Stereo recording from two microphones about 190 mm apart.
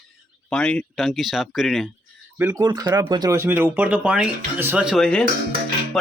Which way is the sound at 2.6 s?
20° right (ahead or behind).